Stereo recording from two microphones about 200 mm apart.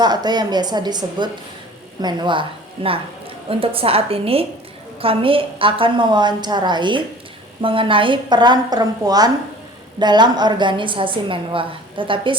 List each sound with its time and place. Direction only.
0.0 s a woman's voice: 20° right (ahead or behind)